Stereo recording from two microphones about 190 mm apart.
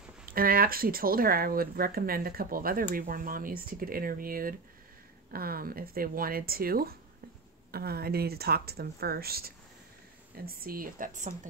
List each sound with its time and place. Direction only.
0.3 s speech: 50° right (ahead or behind)